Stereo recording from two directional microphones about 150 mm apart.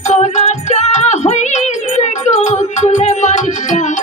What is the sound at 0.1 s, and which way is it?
Music, 50° left (ahead or behind).